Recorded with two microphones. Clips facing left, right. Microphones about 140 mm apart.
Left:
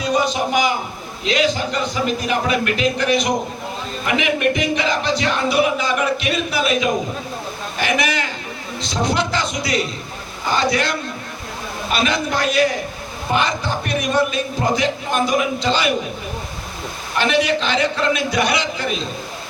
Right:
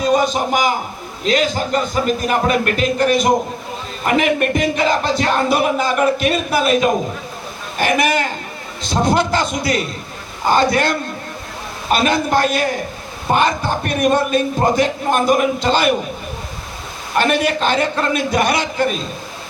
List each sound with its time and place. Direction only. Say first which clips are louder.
0.0 s a man's voice: right 3 dB; 45° right (ahead or behind)
17.2 s speech: right 2 dB; 50° right (ahead or behind)